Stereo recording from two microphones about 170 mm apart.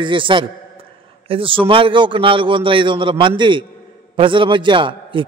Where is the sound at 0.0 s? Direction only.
30° right (ahead or behind).